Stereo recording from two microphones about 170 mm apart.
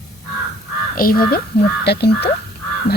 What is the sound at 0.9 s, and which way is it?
Speech, 60° left (ahead or behind).